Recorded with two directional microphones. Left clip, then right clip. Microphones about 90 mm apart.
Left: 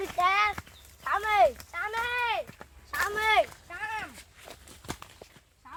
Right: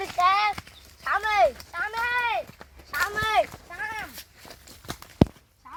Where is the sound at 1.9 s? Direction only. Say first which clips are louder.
Right 3 dB; 55° left (ahead or behind).